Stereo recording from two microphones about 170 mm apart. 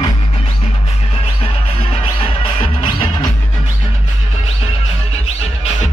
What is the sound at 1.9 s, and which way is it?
Music, 30° left (ahead or behind).